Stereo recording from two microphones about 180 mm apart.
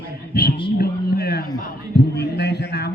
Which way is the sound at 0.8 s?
60° left (ahead or behind).